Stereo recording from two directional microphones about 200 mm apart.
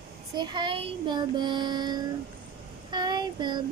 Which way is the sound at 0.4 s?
20° right (ahead or behind).